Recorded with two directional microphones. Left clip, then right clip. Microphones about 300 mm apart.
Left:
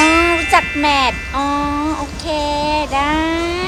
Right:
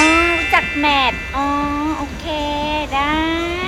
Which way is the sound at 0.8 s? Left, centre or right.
Centre.